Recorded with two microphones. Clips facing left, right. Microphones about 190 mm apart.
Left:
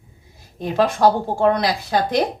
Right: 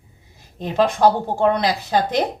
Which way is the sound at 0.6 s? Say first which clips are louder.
Even; 20° right (ahead or behind).